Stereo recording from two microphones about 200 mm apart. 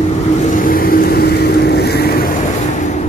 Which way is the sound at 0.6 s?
45° left (ahead or behind).